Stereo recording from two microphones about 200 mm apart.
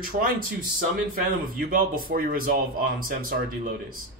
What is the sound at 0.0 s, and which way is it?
Speech, 45° right (ahead or behind).